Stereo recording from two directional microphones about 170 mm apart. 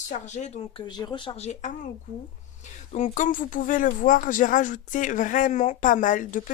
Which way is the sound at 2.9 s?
50° left (ahead or behind).